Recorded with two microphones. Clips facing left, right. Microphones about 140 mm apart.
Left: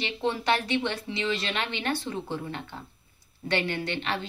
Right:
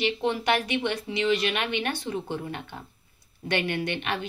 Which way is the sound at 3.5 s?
20° right (ahead or behind).